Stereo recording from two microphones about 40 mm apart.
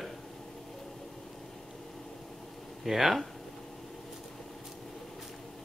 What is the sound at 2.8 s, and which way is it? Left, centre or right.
Speech, centre.